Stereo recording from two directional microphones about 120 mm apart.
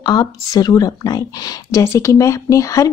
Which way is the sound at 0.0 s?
35° left (ahead or behind).